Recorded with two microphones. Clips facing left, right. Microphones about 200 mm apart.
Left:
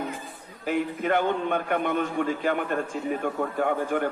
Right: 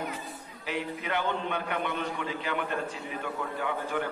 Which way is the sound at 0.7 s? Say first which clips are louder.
Left 8 dB; 50° left (ahead or behind).